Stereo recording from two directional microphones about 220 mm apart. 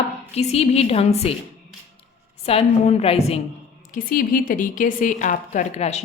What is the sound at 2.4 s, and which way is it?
Speech, 30° left (ahead or behind).